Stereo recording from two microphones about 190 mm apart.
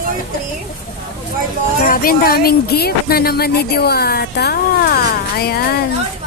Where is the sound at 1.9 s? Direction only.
50° left (ahead or behind).